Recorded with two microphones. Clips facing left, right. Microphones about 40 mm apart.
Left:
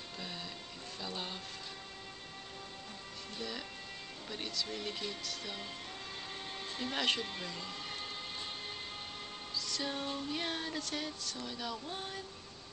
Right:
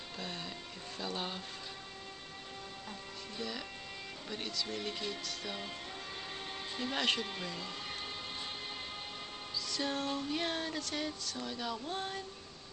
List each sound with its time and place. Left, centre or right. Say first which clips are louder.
0.2 s music: right 2 dB; centre
3.3 s speech: right 1 dB; centre
4.3 s music: right 1 dB; centre
6.7 s speech: right 1 dB; centre
9.7 s music: right 3 dB; centre